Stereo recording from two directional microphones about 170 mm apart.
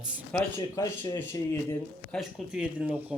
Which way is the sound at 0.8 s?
20° left (ahead or behind).